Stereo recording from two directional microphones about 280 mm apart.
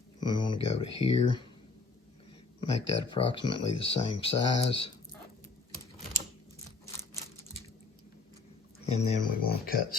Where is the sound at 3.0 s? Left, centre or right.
Centre.